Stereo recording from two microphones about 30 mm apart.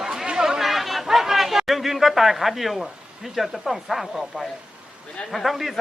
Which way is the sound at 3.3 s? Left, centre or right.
Centre.